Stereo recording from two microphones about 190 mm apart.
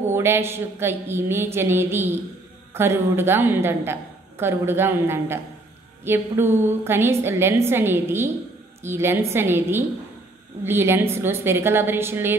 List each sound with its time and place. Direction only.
0.0 s a woman's voice: 15° right (ahead or behind)